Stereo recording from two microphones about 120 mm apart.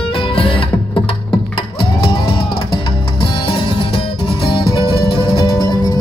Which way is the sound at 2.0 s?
45° left (ahead or behind).